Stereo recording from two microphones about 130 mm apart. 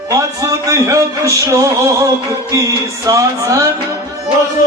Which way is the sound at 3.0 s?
25° right (ahead or behind).